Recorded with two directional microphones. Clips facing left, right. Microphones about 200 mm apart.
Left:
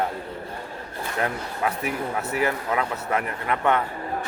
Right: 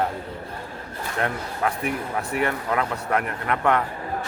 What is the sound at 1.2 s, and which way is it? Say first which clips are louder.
Speech: right 1 dB; 5° left (ahead or behind).